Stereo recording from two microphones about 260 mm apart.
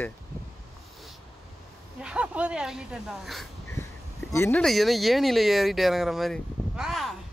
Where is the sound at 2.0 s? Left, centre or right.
Centre.